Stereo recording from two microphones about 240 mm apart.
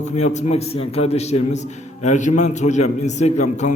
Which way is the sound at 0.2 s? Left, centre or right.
Left.